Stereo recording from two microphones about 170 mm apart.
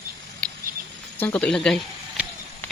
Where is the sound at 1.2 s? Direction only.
5° left (ahead or behind).